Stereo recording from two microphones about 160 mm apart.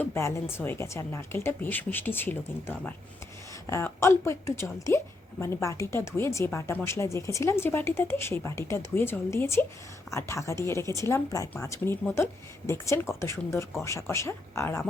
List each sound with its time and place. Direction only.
0.0 s speech: 15° left (ahead or behind)